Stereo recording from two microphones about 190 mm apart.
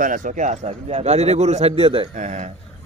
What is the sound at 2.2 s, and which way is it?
Speech, 40° right (ahead or behind).